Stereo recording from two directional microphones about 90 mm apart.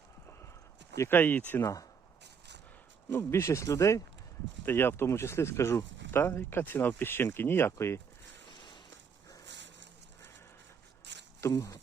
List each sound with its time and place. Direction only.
0.9 s speech: 25° left (ahead or behind)
1.6 s speech: 40° left (ahead or behind)
3.1 s speech: 25° left (ahead or behind)
4.6 s speech: 25° left (ahead or behind)
8.4 s a sound: 60° left (ahead or behind)
11.3 s speech: 35° left (ahead or behind)